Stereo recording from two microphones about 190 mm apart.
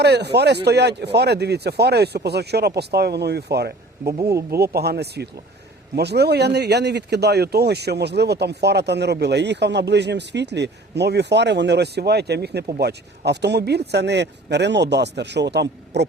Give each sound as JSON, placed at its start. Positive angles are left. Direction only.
{"t": 0.0, "sound": "speech", "side_deg": -60}